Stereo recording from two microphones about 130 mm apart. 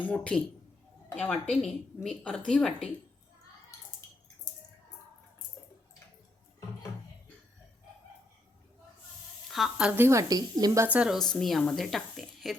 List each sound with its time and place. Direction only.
0.0 s a woman's voice: 10° left (ahead or behind)
9.5 s a woman's voice: centre (ahead or behind); by 10.8 s 30° right (ahead or behind)
10.8 s a woman's voice: 10° right (ahead or behind)
11.3 s speech: 5° left (ahead or behind)